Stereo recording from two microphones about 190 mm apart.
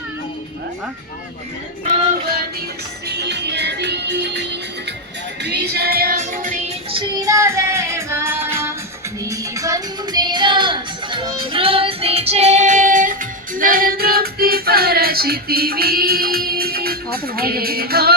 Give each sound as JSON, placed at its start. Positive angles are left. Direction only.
{"t": 3.1, "sound": "music", "side_deg": -60}
{"t": 6.9, "sound": "music", "side_deg": -20}